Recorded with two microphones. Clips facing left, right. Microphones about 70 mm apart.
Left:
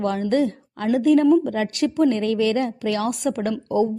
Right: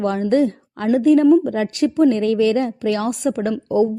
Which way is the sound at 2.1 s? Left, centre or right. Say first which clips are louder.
Right 4 dB; right.